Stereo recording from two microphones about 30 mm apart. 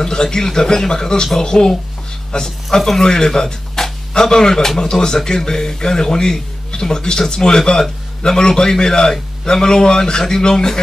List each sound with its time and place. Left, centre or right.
0.0 s speech: left